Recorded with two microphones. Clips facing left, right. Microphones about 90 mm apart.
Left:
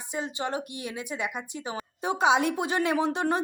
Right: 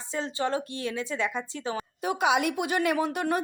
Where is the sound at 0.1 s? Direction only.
15° left (ahead or behind).